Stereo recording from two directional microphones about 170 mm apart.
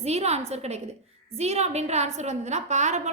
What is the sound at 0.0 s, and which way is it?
A woman's voice, 40° right (ahead or behind).